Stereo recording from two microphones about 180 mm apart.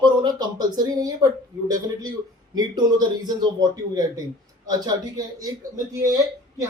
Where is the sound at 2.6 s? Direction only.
25° right (ahead or behind).